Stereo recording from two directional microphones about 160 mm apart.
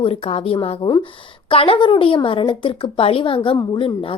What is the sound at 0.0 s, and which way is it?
Speech, 40° left (ahead or behind).